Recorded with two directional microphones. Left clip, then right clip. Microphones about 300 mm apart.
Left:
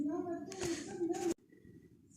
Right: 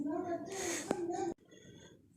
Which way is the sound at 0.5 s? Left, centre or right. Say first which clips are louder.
Right 1 dB; right.